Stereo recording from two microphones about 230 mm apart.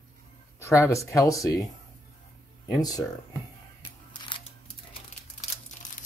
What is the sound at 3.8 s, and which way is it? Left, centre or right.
Music, left.